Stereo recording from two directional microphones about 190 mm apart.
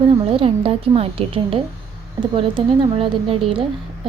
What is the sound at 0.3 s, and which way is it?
A woman's voice, 30° right (ahead or behind).